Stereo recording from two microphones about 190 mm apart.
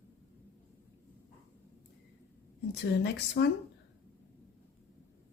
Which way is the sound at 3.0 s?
65° left (ahead or behind).